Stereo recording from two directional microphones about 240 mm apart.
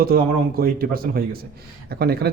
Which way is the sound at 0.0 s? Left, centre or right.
Right.